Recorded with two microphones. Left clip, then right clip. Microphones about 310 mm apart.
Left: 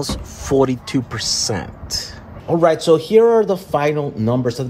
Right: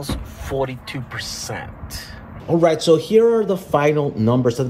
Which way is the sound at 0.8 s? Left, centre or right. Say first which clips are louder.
Left 7 dB; left.